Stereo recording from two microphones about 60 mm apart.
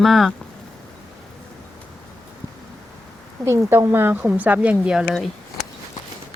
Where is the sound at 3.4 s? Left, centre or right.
Right.